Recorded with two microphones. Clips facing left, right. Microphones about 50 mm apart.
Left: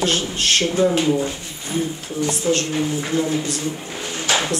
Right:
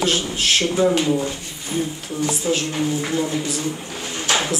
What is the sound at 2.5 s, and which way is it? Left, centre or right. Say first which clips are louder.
Speech: left 2 dB; centre.